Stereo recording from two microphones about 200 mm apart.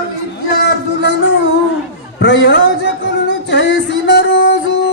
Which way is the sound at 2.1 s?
65° left (ahead or behind).